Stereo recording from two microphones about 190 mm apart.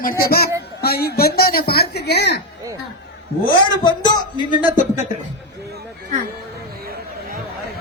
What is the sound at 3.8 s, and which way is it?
Speech, 20° left (ahead or behind).